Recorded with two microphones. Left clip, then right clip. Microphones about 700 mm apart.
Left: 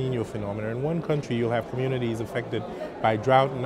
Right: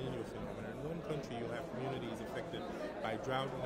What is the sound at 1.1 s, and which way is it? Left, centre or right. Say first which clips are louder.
Speech: left 16 dB; left.